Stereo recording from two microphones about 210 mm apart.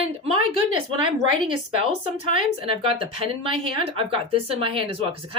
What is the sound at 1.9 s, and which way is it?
Speech, 35° left (ahead or behind).